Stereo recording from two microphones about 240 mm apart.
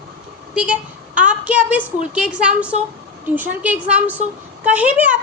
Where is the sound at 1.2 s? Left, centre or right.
Centre.